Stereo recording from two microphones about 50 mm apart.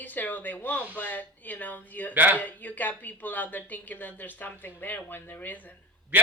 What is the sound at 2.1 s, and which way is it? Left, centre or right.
Speech, right.